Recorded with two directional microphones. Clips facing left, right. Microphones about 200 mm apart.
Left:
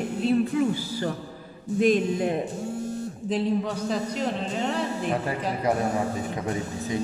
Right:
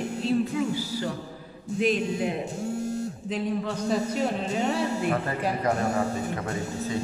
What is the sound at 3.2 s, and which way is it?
Speech, 35° left (ahead or behind).